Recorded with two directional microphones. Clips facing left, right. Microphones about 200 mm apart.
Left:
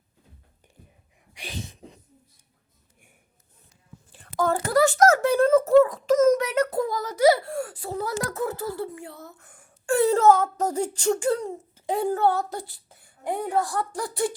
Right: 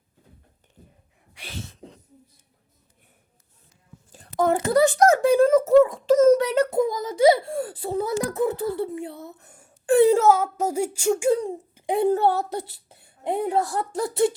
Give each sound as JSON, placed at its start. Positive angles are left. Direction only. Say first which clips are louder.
{"t": 1.3, "sound": "sneeze", "louder": "left 1 dB", "side_deg": 15}
{"t": 4.4, "sound": "a child's voice", "louder": "right 2 dB", "side_deg": -20}
{"t": 5.8, "sound": "speech", "louder": "right 2 dB", "side_deg": -30}